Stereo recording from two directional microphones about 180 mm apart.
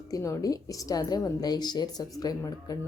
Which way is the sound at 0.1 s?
20° left (ahead or behind).